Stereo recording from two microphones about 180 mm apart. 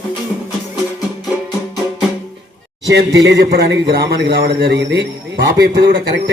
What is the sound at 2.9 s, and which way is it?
A man's voice, 70° right (ahead or behind).